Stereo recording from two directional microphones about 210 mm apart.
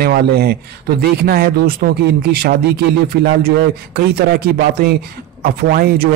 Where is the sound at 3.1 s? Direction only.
50° right (ahead or behind).